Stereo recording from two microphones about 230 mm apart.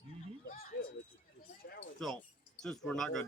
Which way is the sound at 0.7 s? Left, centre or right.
Left.